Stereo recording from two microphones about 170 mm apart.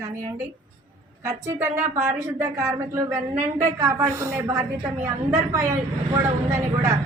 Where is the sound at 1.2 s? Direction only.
15° right (ahead or behind).